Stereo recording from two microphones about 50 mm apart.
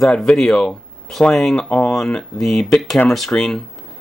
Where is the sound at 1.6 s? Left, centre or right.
Centre.